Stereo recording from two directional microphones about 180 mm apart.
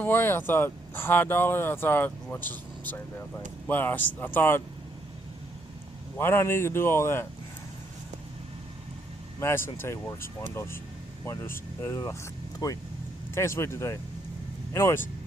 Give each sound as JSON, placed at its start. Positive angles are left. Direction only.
{"t": 0.0, "sound": "speech", "side_deg": 10}
{"t": 6.1, "sound": "speech", "side_deg": 15}
{"t": 9.4, "sound": "speech", "side_deg": 15}
{"t": 11.8, "sound": "speech", "side_deg": 15}